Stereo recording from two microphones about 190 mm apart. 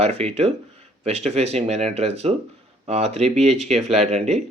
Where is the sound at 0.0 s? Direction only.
35° right (ahead or behind).